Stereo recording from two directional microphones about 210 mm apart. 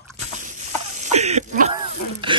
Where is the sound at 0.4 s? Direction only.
35° right (ahead or behind).